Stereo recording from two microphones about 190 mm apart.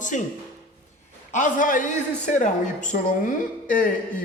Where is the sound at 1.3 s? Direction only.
45° left (ahead or behind).